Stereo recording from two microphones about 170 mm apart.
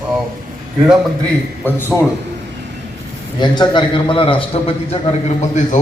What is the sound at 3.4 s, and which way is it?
A man's voice, 25° left (ahead or behind).